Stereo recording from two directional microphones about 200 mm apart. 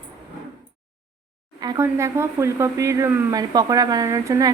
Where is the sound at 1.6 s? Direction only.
15° right (ahead or behind).